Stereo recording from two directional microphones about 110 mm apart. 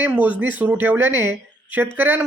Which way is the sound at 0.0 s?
15° right (ahead or behind).